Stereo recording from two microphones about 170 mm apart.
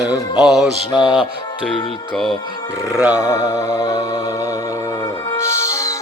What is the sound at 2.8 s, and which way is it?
Speech, 5° right (ahead or behind).